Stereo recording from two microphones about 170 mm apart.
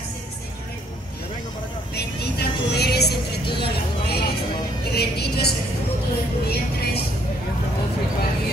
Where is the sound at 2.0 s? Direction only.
75° left (ahead or behind).